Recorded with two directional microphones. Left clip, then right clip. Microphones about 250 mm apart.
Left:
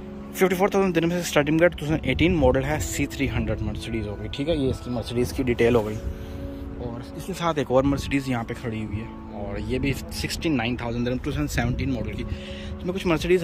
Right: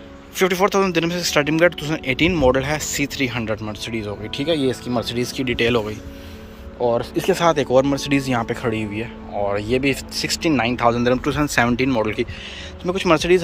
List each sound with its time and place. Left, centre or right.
0.4 s a man's voice: centre
6.8 s a man's voice: centre